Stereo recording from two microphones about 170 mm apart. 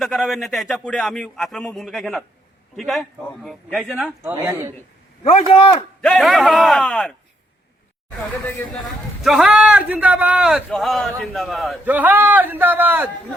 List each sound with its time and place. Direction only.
0.0 s speech: centre (ahead or behind)
4.4 s a man's voice: 15° right (ahead or behind)
5.2 s a man's voice: 30° left (ahead or behind)
6.0 s speech: centre (ahead or behind)
9.2 s a man's voice: 5° right (ahead or behind)